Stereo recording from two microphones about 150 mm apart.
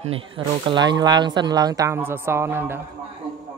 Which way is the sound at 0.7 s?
30° right (ahead or behind).